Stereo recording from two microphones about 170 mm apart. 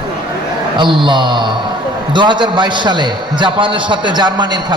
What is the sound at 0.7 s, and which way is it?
A man's voice, 30° right (ahead or behind).